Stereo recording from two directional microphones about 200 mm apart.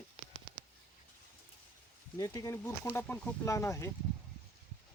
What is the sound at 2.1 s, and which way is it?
Speech, 15° left (ahead or behind).